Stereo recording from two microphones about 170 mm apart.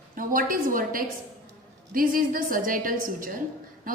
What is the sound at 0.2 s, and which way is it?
A woman's voice, 55° right (ahead or behind).